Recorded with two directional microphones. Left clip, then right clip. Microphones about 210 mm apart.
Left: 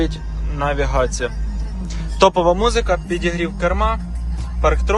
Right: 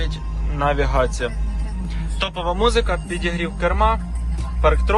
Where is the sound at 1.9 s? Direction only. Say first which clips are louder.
Left 12 dB; 35° left (ahead or behind).